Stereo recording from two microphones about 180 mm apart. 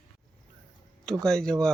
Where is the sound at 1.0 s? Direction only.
5° left (ahead or behind).